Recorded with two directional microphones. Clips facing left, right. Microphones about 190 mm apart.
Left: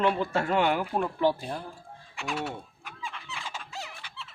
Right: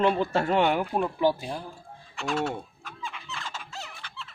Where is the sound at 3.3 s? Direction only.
10° left (ahead or behind).